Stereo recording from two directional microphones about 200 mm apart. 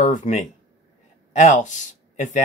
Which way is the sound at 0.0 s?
40° left (ahead or behind).